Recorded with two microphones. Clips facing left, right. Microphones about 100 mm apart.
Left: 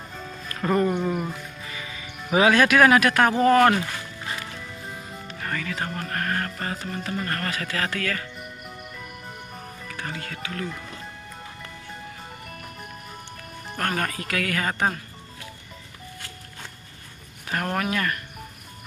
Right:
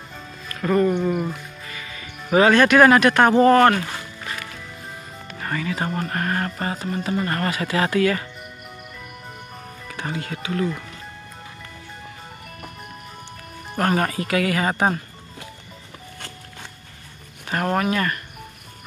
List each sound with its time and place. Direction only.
0.6 s speech: 10° left (ahead or behind)
1.7 s music: 15° left (ahead or behind)
2.3 s speech: 5° left (ahead or behind)
5.4 s speech: 10° right (ahead or behind)
9.9 s speech: 20° right (ahead or behind)
13.7 s speech: 10° right (ahead or behind)
17.5 s speech: 5° right (ahead or behind)